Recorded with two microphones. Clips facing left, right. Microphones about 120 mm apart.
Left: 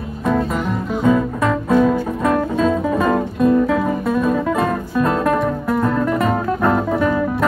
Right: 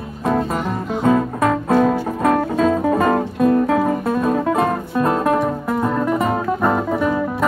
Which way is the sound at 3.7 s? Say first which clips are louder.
Right 1 dB; 40° right (ahead or behind).